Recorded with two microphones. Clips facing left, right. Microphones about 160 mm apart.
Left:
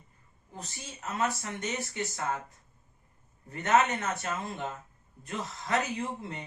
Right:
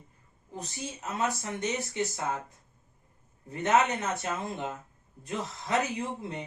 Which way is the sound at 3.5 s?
20° right (ahead or behind).